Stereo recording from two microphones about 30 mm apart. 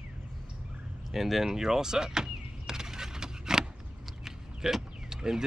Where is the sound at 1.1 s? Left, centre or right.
Centre.